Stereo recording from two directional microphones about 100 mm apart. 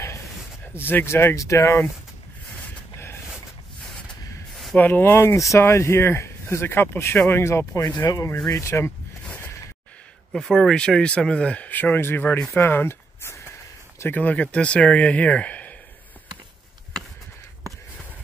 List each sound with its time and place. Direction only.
0.8 s speech: 25° left (ahead or behind)
4.7 s speech: 20° left (ahead or behind)
9.2 s a sound: 20° left (ahead or behind)
10.3 s speech: 5° left (ahead or behind)